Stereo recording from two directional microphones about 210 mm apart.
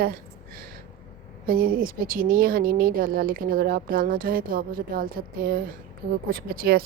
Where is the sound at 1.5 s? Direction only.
45° right (ahead or behind).